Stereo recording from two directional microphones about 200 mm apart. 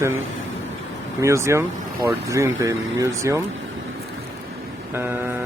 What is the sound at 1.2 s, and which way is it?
Speech, 15° right (ahead or behind).